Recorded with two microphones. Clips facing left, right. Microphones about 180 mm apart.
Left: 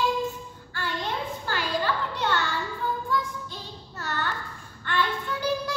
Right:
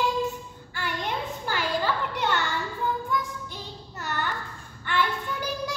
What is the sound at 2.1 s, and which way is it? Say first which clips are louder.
Children playing: even; 20° right (ahead or behind).